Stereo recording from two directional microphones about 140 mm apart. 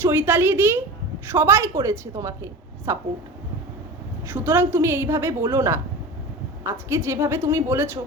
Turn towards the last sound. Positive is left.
turn(degrees=-15)  # may be behind; listen again after turning